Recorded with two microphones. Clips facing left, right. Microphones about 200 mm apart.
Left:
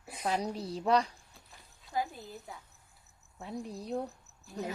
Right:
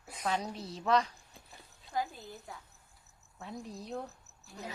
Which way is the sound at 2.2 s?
Centre (ahead or behind).